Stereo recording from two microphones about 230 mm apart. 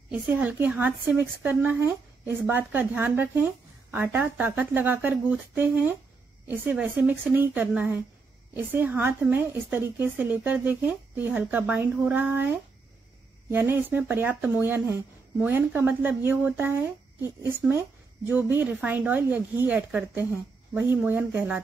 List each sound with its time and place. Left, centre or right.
0.1 s a woman's voice: centre